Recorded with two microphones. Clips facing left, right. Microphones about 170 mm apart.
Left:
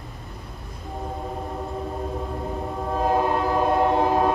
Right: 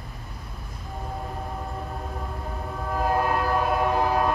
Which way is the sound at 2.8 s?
20° left (ahead or behind).